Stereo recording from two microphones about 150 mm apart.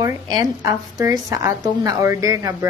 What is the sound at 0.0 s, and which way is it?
A woman's voice, 25° right (ahead or behind).